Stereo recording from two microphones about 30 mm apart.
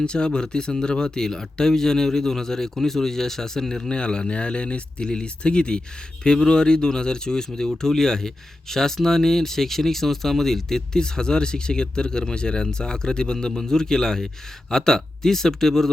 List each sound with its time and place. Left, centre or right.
0.0 s speech: left
3.8 s speech: left